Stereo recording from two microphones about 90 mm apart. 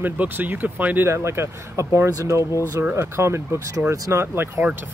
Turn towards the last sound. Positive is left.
turn(degrees=-25)  # may be behind; listen again after turning